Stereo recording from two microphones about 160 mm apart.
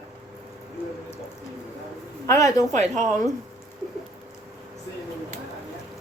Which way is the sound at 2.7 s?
50° right (ahead or behind).